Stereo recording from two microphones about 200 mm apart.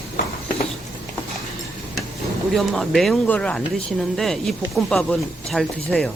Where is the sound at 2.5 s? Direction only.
Centre (ahead or behind).